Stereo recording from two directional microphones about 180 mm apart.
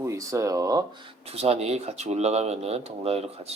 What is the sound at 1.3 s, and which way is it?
Speech, 35° right (ahead or behind).